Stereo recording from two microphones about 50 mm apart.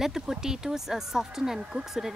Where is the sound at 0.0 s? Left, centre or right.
Centre.